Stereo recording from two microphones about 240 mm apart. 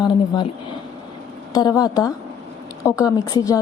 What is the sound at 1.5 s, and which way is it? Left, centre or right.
A woman's voice, centre.